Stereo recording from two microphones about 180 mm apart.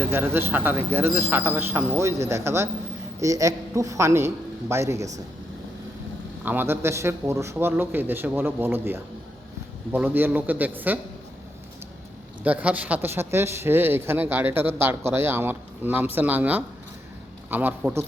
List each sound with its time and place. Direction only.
0.0 s speech: 10° right (ahead or behind)
6.4 s speech: 10° right (ahead or behind)
12.4 s speech: 10° right (ahead or behind)